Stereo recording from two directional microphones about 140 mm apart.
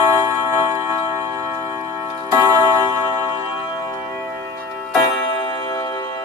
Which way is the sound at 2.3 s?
20° right (ahead or behind).